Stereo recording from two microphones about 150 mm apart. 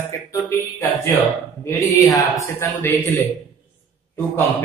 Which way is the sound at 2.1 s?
20° left (ahead or behind).